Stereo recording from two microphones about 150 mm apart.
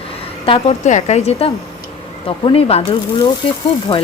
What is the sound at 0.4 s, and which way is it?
Speech, 35° left (ahead or behind).